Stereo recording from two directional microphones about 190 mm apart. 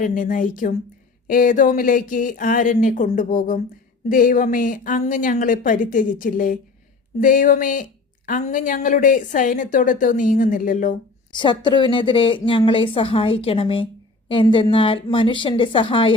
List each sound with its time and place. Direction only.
0.0 s a woman's voice: 45° left (ahead or behind)
11.3 s a woman's voice: 25° left (ahead or behind)